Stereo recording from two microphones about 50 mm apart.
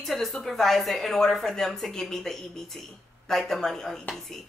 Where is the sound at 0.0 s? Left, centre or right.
Centre.